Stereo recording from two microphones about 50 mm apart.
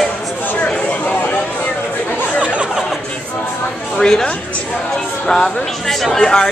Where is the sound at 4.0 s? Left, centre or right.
Centre.